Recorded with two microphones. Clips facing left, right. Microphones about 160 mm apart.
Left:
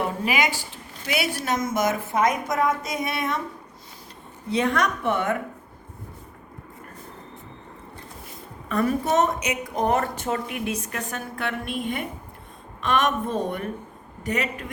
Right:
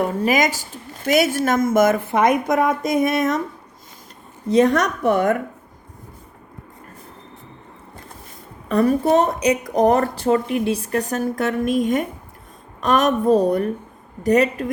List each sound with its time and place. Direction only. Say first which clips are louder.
0.3 s speech: right 6 dB; 45° right (ahead or behind)
4.4 s speech: right 7 dB; 40° right (ahead or behind)
8.7 s speech: right 6 dB; 35° right (ahead or behind)